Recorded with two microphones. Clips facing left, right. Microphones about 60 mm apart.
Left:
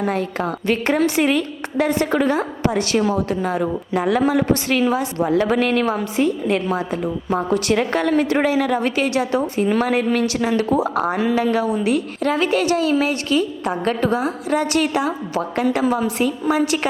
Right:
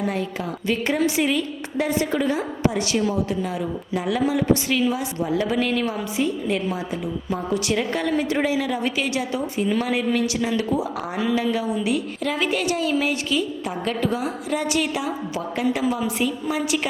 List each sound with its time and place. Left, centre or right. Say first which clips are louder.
0.7 s a woman's voice: left 3 dB; left